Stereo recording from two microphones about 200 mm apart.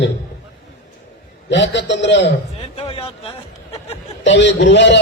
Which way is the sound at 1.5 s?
65° left (ahead or behind).